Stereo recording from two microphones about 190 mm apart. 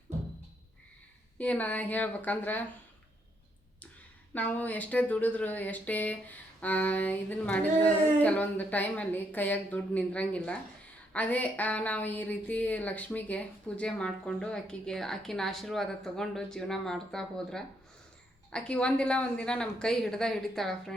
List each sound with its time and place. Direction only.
1.4 s speech: 5° left (ahead or behind)
4.4 s speech: 10° left (ahead or behind)